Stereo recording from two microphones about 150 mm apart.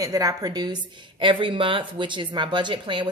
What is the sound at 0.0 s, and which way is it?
A woman's voice, 25° right (ahead or behind).